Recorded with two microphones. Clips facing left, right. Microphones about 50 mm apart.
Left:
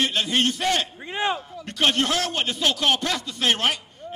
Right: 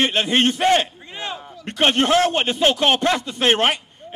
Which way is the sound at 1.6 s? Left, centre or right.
Right.